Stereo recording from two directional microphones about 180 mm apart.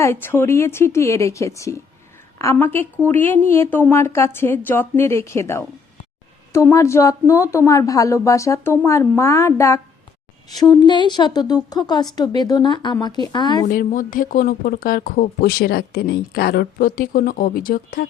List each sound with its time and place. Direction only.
0.0 s a woman's voice: 15° left (ahead or behind)
13.7 s speech: 50° left (ahead or behind)